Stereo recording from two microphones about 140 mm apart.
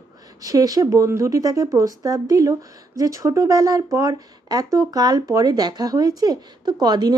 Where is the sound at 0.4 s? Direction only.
25° right (ahead or behind).